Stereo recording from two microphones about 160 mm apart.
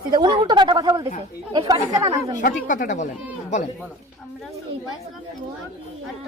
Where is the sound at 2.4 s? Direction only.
55° left (ahead or behind).